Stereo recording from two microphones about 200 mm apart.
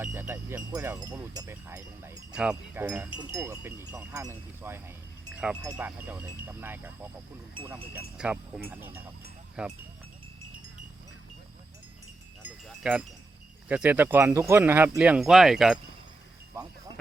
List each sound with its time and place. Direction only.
0.0 s speech: 10° right (ahead or behind)
5.3 s wind chime: 5° right (ahead or behind)
5.7 s speech: 10° right (ahead or behind)
12.4 s wind chime: 5° right (ahead or behind)
13.7 s speech: 5° right (ahead or behind)